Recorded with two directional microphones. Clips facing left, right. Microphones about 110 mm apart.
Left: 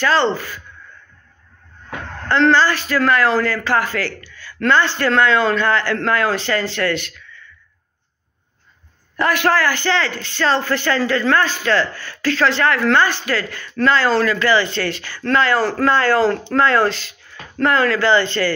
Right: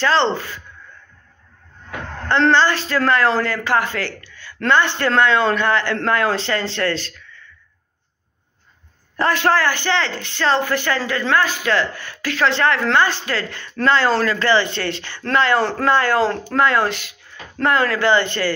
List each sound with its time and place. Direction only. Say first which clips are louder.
0.0 s a man's voice: even; 25° right (ahead or behind)
2.2 s a man's voice: left 1 dB; 25° right (ahead or behind)
9.1 s a man's voice: even; 30° right (ahead or behind)